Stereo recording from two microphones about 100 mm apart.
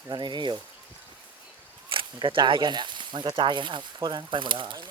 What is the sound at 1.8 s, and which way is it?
Speech, 60° right (ahead or behind).